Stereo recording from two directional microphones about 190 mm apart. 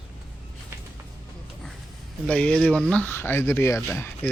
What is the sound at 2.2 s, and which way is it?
Speech, 5° left (ahead or behind).